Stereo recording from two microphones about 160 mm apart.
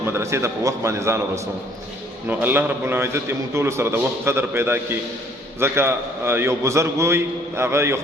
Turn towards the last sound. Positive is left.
turn(degrees=-15)  # may be behind; listen again after turning